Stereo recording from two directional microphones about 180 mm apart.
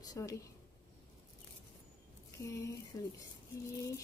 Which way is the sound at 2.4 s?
15° left (ahead or behind).